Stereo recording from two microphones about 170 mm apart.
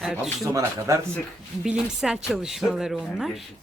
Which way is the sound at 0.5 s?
15° right (ahead or behind).